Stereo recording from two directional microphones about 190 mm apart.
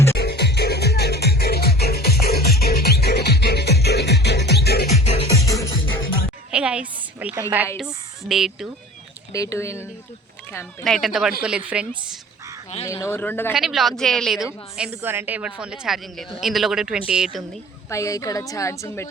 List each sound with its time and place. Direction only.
0.2 s music: 60° left (ahead or behind)
4.9 s music: 35° left (ahead or behind)
5.3 s music: 15° left (ahead or behind)
6.5 s a sound: 5° right (ahead or behind)
7.8 s speech: centre (ahead or behind)
9.3 s a woman's voice: 15° left (ahead or behind)
10.8 s a man's voice: centre (ahead or behind)
12.8 s a woman's voice: 15° left (ahead or behind)
13.5 s a man's voice: 5° right (ahead or behind)
17.8 s a woman's voice: 15° left (ahead or behind)